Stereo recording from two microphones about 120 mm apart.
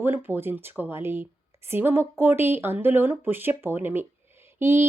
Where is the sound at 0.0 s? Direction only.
15° right (ahead or behind).